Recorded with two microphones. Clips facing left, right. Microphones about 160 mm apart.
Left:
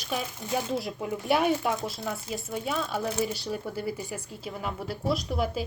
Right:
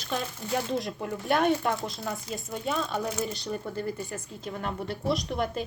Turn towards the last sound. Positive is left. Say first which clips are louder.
# even
turn(degrees=5)  # may be behind; listen again after turning